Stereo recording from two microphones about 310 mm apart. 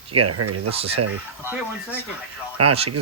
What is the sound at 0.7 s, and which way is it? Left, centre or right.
Speech, centre.